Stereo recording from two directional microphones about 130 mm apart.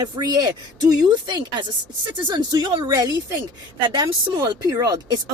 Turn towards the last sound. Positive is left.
turn(degrees=-30)  # may be behind; listen again after turning